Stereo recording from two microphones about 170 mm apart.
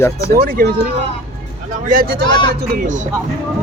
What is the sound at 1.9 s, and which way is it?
Speech, 60° right (ahead or behind).